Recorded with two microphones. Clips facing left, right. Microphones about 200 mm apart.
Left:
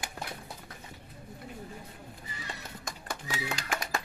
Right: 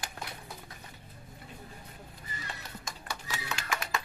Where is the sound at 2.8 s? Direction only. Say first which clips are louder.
Left 3 dB; 55° left (ahead or behind).